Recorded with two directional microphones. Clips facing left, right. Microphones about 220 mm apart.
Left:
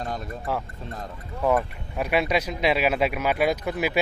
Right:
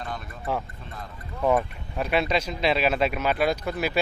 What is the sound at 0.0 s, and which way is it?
Music, 40° left (ahead or behind).